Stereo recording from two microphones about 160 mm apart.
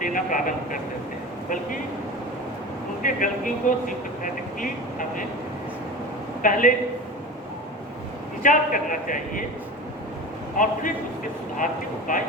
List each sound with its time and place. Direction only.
0.0 s vehicle: 55° left (ahead or behind)
3.0 s speech: 55° left (ahead or behind)
6.4 s a man's voice: 55° left (ahead or behind)
8.4 s a man's voice: 55° left (ahead or behind)
10.6 s a man's voice: 55° left (ahead or behind)